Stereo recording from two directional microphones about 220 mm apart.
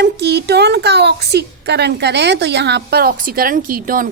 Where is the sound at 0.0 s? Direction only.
50° right (ahead or behind).